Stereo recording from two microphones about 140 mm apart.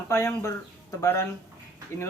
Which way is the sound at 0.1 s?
20° left (ahead or behind).